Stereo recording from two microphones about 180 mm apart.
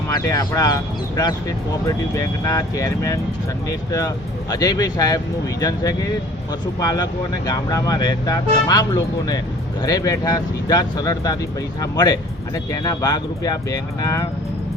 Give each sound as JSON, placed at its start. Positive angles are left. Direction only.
{"t": 0.1, "sound": "speech", "side_deg": 20}